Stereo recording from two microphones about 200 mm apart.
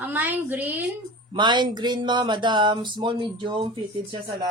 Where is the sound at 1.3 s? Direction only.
25° right (ahead or behind).